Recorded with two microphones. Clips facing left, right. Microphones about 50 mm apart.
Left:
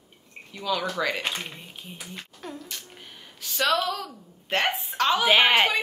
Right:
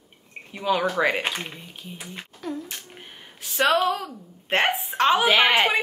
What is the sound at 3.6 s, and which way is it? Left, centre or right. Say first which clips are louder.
A woman's voice: right 4 dB; right.